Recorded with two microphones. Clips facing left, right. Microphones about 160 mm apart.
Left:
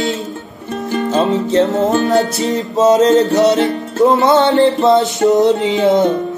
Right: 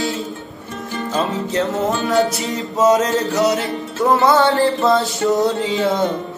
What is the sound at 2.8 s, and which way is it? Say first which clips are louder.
Music: left 5 dB; 25° left (ahead or behind).